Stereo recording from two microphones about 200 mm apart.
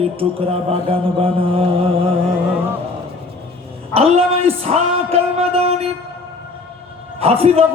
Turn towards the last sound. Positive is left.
turn(degrees=-30)  # may be behind; listen again after turning